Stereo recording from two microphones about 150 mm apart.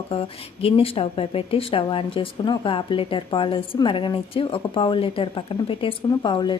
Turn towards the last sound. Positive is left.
turn(degrees=30)  # may be behind; listen again after turning